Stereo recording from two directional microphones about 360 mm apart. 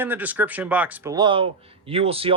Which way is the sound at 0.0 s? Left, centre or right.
Centre.